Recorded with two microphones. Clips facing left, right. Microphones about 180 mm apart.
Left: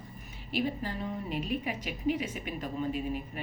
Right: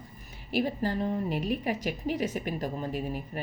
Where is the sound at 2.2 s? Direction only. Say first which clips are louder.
Right 5 dB; 40° right (ahead or behind).